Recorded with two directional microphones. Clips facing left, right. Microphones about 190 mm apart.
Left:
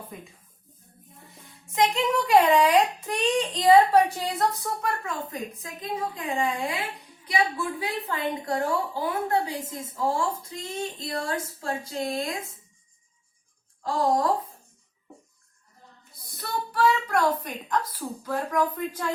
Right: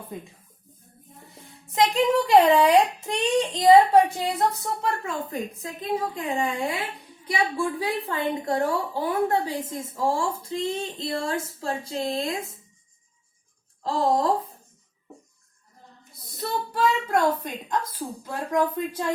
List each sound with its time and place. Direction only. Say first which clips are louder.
1.7 s speech: right 3 dB; 35° right (ahead or behind)
13.8 s speech: right 1 dB; 25° right (ahead or behind)
16.4 s speech: even; 25° right (ahead or behind)